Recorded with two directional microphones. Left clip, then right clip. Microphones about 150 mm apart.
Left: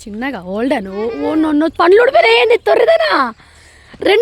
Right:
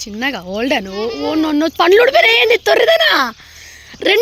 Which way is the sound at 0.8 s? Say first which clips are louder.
Left 1 dB; 10° left (ahead or behind).